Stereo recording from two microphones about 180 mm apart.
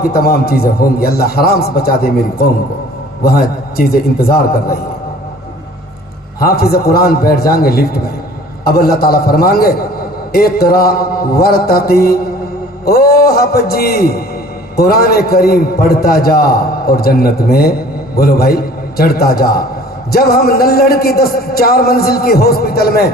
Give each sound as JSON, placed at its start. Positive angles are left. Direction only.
{"t": 0.0, "sound": "a man's voice", "side_deg": 55}
{"t": 3.2, "sound": "a man's voice", "side_deg": 55}
{"t": 6.4, "sound": "a man's voice", "side_deg": 60}
{"t": 12.8, "sound": "a sound", "side_deg": 60}
{"t": 14.8, "sound": "a man's voice", "side_deg": 55}